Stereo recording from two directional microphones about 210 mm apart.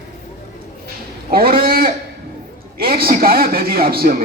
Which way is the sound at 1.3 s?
45° right (ahead or behind).